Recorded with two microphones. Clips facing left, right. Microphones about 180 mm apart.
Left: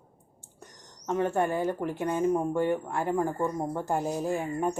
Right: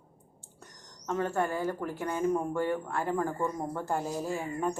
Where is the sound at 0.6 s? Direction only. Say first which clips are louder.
Left 3 dB; 15° left (ahead or behind).